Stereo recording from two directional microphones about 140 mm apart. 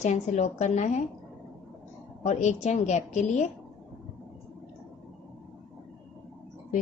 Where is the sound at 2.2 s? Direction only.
55° left (ahead or behind).